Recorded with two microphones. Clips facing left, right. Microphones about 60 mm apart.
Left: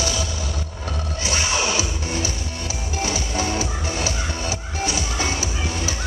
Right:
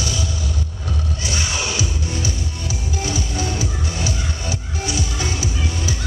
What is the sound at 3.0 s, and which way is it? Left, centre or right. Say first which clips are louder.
Music: left 2 dB; left.